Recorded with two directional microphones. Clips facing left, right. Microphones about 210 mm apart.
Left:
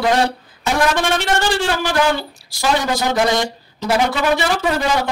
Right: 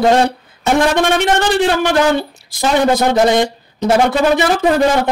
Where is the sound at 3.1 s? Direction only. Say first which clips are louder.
Right 5 dB; 25° right (ahead or behind).